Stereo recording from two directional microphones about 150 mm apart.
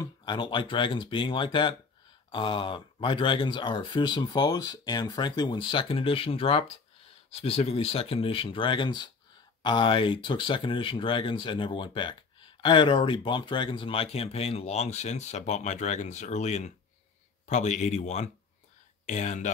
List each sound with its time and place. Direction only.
0.0 s speech: 30° left (ahead or behind); by 19.5 s 50° left (ahead or behind)